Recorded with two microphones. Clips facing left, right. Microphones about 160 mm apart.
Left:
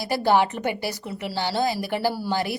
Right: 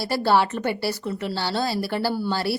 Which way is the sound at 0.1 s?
15° left (ahead or behind).